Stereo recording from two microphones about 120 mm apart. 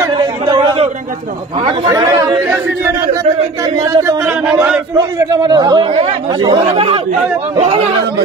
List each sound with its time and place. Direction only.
0.0 s a sound: 30° right (ahead or behind)
1.9 s chatter: 35° right (ahead or behind)
4.5 s speech: 10° right (ahead or behind)
5.3 s a man's voice: 35° right (ahead or behind); by 7.9 s 55° right (ahead or behind)